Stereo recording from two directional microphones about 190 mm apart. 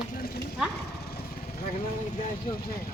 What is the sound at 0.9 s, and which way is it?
Lawn mower, 60° left (ahead or behind).